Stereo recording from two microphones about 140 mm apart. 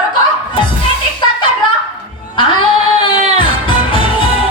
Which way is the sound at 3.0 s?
35° left (ahead or behind).